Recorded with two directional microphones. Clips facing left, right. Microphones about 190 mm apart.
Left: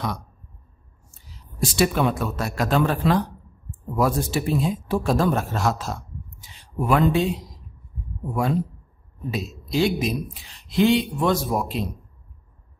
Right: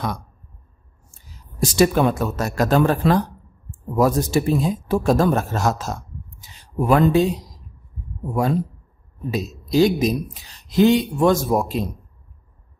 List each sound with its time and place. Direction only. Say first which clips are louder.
1.1 s speech: even; 45° right (ahead or behind)
9.7 s speech: right 5 dB; 40° right (ahead or behind)